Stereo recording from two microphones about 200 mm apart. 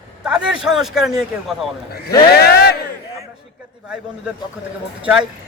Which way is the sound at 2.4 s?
55° left (ahead or behind).